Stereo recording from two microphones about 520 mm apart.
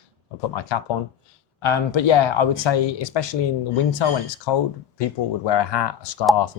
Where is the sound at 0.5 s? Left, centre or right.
Left.